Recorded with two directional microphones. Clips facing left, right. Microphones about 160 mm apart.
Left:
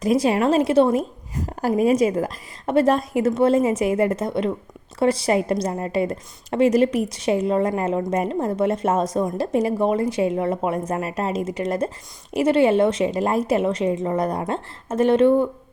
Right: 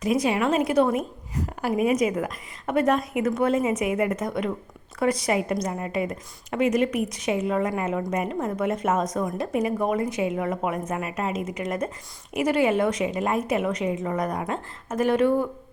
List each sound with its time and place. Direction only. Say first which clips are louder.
0.0 s a woman's voice: left 4 dB; 35° left (ahead or behind)